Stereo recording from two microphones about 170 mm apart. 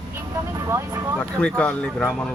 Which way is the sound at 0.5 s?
20° right (ahead or behind).